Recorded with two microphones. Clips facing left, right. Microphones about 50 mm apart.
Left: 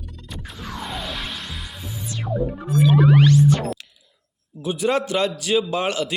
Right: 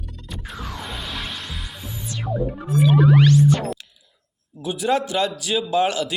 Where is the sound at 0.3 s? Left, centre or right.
Centre.